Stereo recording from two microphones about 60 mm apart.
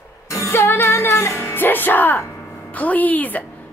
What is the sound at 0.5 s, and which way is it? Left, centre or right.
A woman's voice, left.